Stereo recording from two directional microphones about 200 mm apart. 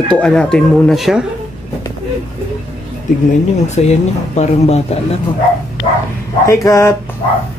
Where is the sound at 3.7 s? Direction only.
35° left (ahead or behind).